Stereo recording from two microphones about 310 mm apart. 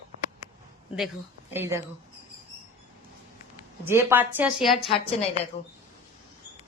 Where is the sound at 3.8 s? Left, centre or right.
Centre.